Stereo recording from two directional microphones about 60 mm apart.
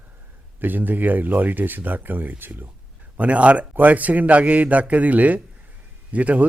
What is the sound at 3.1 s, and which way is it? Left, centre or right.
A man's voice, right.